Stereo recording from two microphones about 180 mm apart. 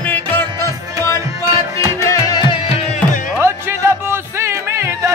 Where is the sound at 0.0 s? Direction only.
10° left (ahead or behind).